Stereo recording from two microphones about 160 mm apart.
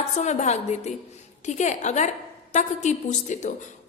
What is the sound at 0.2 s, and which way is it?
A woman's voice, 45° left (ahead or behind).